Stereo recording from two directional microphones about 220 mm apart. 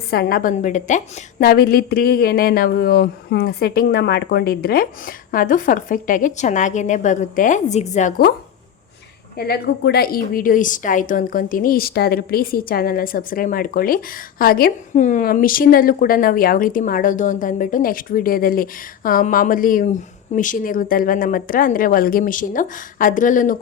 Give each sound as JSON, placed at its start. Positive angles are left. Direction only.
{"t": 0.1, "sound": "a woman's voice", "side_deg": 45}
{"t": 9.4, "sound": "a woman's voice", "side_deg": 45}